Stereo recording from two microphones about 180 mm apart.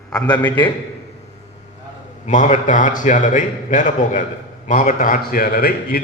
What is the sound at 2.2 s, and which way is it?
A man's voice, 45° left (ahead or behind).